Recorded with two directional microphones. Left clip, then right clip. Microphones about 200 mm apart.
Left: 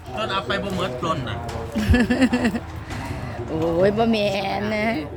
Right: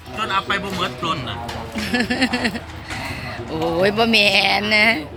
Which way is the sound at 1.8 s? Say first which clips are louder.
Even; 25° left (ahead or behind).